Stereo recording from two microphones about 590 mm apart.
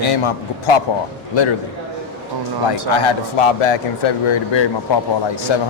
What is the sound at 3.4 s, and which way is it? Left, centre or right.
Speech, left.